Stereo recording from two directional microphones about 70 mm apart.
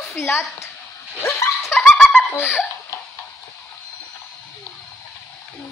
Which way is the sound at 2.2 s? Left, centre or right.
Left.